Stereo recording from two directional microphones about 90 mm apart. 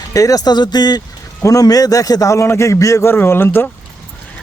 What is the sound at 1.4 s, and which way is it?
A man's voice, 40° left (ahead or behind).